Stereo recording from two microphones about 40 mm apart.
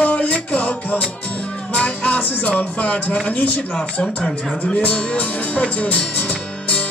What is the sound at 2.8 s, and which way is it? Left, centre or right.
Speech, left.